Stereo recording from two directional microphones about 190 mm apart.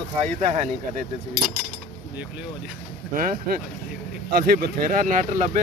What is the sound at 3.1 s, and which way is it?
Speech, 45° right (ahead or behind).